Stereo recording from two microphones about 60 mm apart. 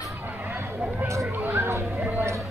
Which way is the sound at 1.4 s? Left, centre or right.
Right.